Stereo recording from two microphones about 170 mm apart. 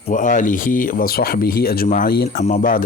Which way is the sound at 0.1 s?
50° left (ahead or behind).